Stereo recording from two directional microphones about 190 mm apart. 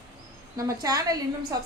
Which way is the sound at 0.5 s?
20° right (ahead or behind).